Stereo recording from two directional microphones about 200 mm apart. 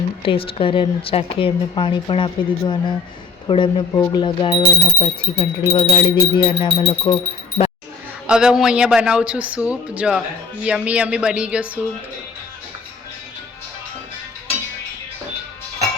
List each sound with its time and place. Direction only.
0.2 s speech: 25° left (ahead or behind)
8.3 s speech: 5° right (ahead or behind)